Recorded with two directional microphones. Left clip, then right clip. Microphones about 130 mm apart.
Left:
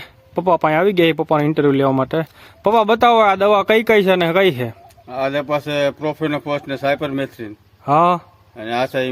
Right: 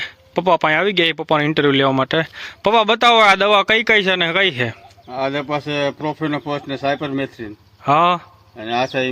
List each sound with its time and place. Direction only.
0.0 s speech: 5° left (ahead or behind)
5.1 s speech: 35° left (ahead or behind)
7.9 s speech: centre (ahead or behind)
8.5 s speech: 35° left (ahead or behind)